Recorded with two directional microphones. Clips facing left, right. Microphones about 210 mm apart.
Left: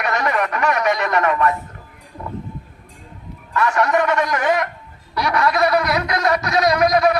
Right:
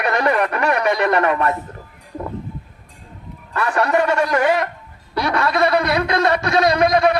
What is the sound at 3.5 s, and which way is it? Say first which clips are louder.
A man's voice: even; 30° right (ahead or behind).